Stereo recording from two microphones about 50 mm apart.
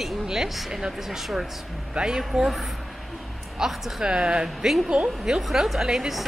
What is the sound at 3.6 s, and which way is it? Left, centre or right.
Speech, centre.